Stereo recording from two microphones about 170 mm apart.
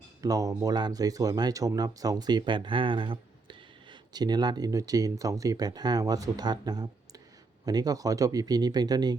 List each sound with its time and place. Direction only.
0.2 s speech: 20° right (ahead or behind)